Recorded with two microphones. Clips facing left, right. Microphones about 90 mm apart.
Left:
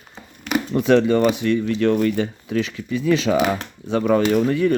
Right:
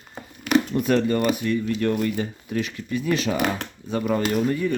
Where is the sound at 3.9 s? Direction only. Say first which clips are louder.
Left 6 dB; 85° left.